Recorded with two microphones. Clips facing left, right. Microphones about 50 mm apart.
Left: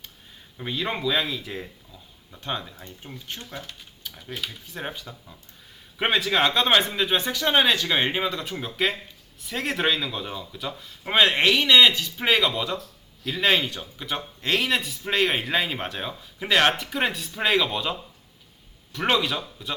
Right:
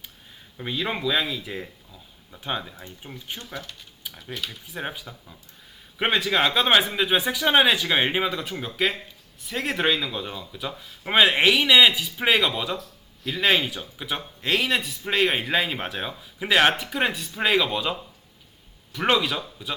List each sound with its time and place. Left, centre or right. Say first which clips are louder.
0.5 s a man's voice: even; centre